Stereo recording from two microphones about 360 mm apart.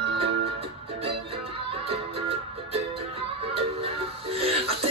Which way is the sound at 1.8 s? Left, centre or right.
Centre.